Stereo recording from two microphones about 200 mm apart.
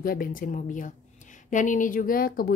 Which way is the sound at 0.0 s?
45° left (ahead or behind).